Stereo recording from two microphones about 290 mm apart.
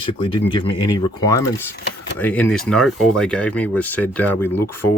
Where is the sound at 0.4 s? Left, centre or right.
Centre.